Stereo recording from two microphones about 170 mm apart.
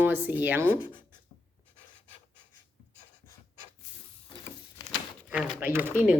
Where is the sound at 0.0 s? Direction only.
10° right (ahead or behind).